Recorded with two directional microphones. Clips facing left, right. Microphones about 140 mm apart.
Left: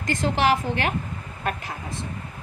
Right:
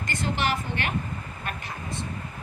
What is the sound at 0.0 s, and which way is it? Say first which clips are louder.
Speech: left 6 dB; 90° left.